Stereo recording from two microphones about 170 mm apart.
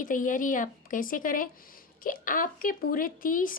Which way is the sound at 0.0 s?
50° left (ahead or behind).